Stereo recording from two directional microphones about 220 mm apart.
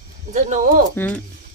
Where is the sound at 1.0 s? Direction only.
10° left (ahead or behind).